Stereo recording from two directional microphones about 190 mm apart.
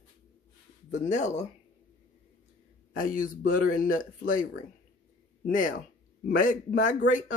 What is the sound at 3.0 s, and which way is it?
A man's voice, 45° left (ahead or behind).